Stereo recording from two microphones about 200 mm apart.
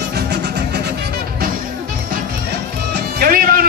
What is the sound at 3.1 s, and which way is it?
Music, 50° right (ahead or behind).